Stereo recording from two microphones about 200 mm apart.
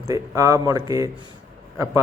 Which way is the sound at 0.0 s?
15° right (ahead or behind).